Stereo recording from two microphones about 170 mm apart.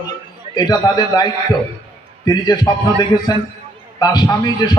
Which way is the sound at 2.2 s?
25° left (ahead or behind).